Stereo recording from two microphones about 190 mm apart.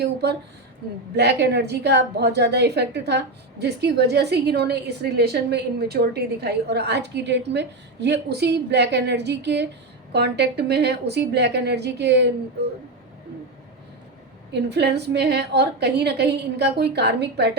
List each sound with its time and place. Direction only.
0.0 s a woman's voice: 60° right (ahead or behind)
14.5 s a woman's voice: 65° right (ahead or behind)